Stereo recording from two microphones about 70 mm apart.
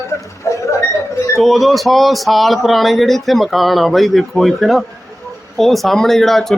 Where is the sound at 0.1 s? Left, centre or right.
Left.